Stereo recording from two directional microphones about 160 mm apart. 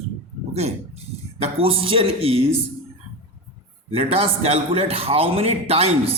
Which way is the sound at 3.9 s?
35° right (ahead or behind).